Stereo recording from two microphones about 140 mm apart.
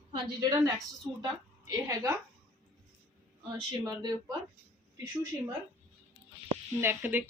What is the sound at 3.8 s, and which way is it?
Speech, 30° right (ahead or behind).